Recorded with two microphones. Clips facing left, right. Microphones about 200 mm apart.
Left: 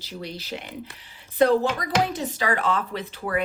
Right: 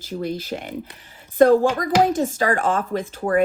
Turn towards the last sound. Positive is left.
turn(degrees=-45)  # may be behind; listen again after turning